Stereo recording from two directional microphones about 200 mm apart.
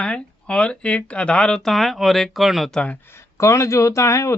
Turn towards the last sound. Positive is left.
turn(degrees=15)  # may be behind; listen again after turning